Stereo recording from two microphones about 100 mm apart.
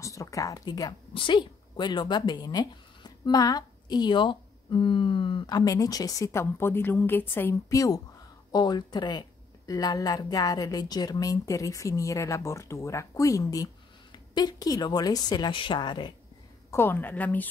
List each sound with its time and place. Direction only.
0.0 s speech: 30° left (ahead or behind)
1.1 s speech: 55° left (ahead or behind); by 7.5 s 20° left (ahead or behind)
7.7 s a woman's voice: 35° left (ahead or behind)
16.7 s a woman's voice: 20° left (ahead or behind)